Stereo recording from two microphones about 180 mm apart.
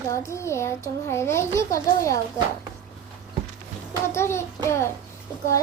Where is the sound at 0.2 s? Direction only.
15° left (ahead or behind).